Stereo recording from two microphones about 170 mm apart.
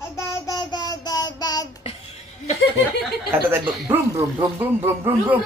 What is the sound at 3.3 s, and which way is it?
A man's voice, 15° right (ahead or behind).